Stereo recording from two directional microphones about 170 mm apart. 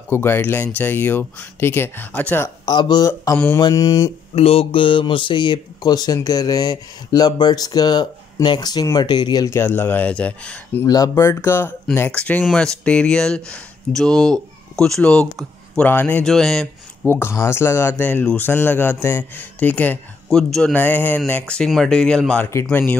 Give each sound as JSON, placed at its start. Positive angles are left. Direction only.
{"t": 0.1, "sound": "speech", "side_deg": 15}
{"t": 2.7, "sound": "speech", "side_deg": 25}
{"t": 4.4, "sound": "speech", "side_deg": 35}